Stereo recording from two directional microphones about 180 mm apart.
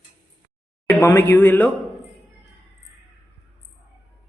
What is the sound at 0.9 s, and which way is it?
Speech, 15° left (ahead or behind).